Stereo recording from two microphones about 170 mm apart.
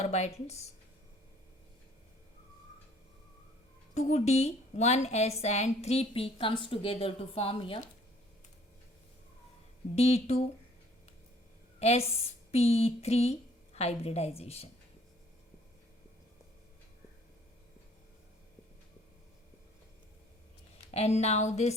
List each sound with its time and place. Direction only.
0.0 s a woman's voice: 40° left (ahead or behind)
3.9 s a woman's voice: 40° left (ahead or behind)
9.9 s a woman's voice: 40° left (ahead or behind)
11.8 s a woman's voice: 35° left (ahead or behind)
20.9 s a woman's voice: 40° left (ahead or behind)